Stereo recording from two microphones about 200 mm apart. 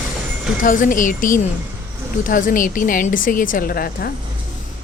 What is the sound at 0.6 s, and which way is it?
Speech, 40° left (ahead or behind).